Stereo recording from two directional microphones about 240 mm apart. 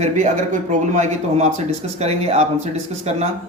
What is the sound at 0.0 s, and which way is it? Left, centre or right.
A man's voice, right.